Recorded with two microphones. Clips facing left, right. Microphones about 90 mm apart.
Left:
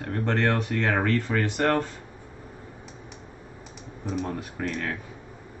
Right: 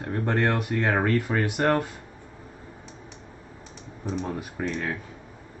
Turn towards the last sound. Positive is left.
turn(degrees=-5)  # may be behind; listen again after turning